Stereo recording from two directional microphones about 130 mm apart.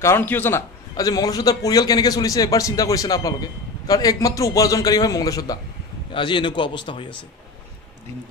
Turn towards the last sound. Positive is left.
turn(degrees=40)  # may be behind; listen again after turning